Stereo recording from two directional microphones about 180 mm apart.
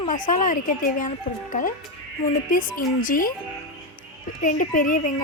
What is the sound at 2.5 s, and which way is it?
Speech, 50° left (ahead or behind).